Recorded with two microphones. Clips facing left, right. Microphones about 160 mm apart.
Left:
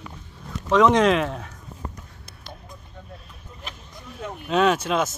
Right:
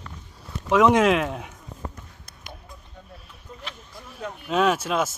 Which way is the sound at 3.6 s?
15° left (ahead or behind).